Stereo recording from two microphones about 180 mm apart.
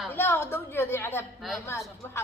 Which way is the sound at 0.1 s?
10° left (ahead or behind).